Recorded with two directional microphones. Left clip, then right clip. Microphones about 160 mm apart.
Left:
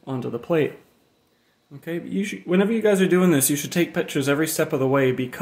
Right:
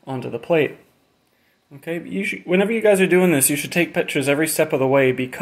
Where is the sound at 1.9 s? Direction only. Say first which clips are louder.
Right 4 dB; 10° left (ahead or behind).